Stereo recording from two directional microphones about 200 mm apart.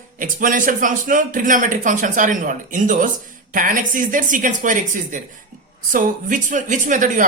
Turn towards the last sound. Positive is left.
turn(degrees=-40)  # may be behind; listen again after turning